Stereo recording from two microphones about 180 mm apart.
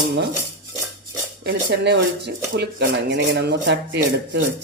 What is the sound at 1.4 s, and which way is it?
Speech, 70° right (ahead or behind).